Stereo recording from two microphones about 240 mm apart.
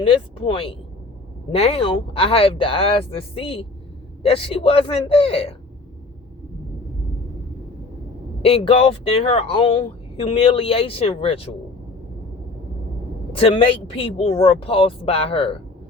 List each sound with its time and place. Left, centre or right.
0.0 s speech: left
8.4 s speech: left
13.3 s speech: left